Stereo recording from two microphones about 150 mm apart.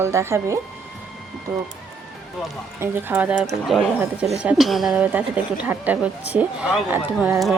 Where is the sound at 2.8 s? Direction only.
15° right (ahead or behind).